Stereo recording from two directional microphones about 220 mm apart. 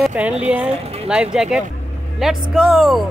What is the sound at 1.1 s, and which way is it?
Speech, 5° right (ahead or behind).